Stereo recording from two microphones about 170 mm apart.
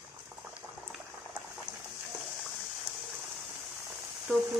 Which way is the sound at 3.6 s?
Centre (ahead or behind).